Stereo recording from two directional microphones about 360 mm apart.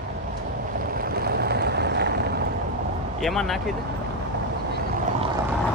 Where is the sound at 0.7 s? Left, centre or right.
Right.